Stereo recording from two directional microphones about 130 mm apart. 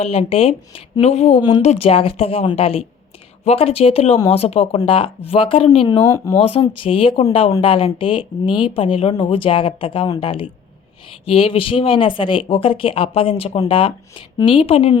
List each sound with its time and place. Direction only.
0.0 s speech: 50° left (ahead or behind)
6.1 s speech: 25° left (ahead or behind)
6.3 s speech: 45° left (ahead or behind)